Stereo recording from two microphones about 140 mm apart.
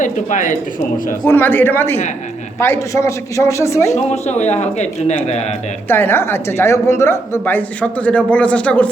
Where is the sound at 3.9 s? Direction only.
55° left (ahead or behind).